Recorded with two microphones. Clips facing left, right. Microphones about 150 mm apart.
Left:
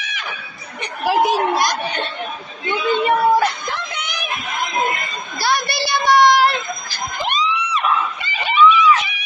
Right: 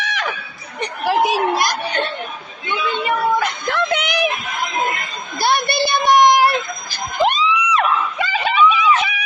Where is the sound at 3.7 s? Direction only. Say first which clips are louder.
Right 8 dB; 65° right (ahead or behind).